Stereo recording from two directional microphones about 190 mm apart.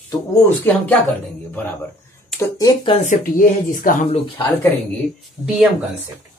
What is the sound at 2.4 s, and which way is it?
Speech, 20° left (ahead or behind).